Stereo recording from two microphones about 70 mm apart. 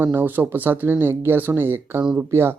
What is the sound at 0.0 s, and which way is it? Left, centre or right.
Speech, right.